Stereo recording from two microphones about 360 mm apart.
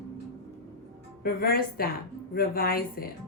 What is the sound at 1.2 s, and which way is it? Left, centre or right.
A woman's voice, left.